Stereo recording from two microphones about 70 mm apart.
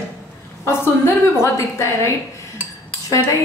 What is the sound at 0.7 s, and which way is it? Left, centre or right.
A woman's voice, left.